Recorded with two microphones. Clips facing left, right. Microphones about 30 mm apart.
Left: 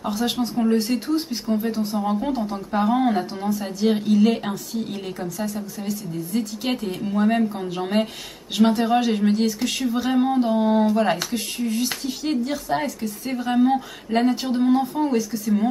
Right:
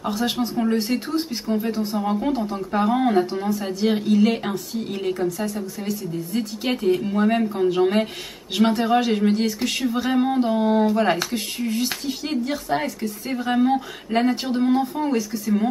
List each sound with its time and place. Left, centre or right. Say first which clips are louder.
0.0 s speech: even; centre